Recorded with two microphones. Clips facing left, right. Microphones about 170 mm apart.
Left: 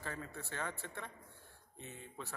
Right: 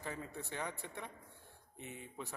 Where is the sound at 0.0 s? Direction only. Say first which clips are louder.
Right 1 dB; 15° right (ahead or behind).